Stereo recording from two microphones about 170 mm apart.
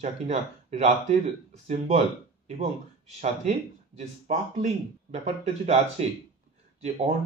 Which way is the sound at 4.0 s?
40° right (ahead or behind).